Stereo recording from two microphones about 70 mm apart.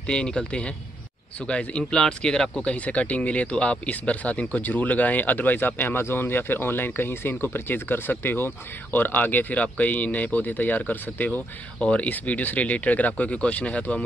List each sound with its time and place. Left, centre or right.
0.0 s a man's voice: centre